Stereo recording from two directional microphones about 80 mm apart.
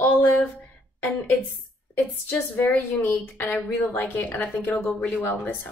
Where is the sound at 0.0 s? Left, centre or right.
Left.